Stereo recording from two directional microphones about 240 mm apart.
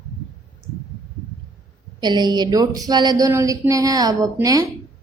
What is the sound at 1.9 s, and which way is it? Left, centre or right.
A woman's voice, centre.